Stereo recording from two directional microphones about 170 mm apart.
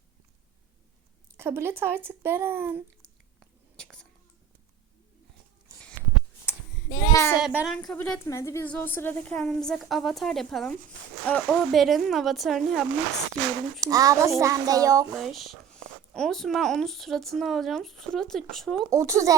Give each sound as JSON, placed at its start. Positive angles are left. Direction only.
{"t": 1.4, "sound": "speech", "side_deg": -15}
{"t": 3.0, "sound": "biting", "side_deg": 5}
{"t": 6.5, "sound": "a sound", "side_deg": -10}
{"t": 6.9, "sound": "a child's voice", "side_deg": 15}
{"t": 7.3, "sound": "speech", "side_deg": -5}
{"t": 8.3, "sound": "a child's voice", "side_deg": 15}
{"t": 13.8, "sound": "a child's voice", "side_deg": -20}
{"t": 15.1, "sound": "speech", "side_deg": 0}
{"t": 18.9, "sound": "a child's voice", "side_deg": -20}